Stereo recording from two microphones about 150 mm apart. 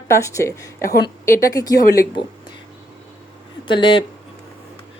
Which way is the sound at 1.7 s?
90° left.